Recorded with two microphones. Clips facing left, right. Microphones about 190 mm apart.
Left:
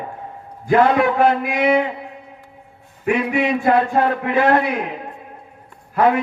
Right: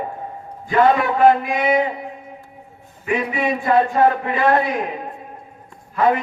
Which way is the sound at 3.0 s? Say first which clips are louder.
Left 3 dB; 60° left (ahead or behind).